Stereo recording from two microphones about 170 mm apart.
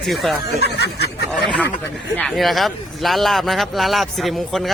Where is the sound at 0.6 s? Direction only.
75° left (ahead or behind).